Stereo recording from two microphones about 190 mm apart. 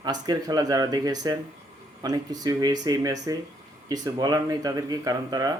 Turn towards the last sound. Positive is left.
turn(degrees=-20)  # may be behind; listen again after turning